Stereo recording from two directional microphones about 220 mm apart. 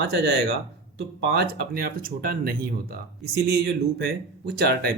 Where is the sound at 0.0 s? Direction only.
50° right (ahead or behind).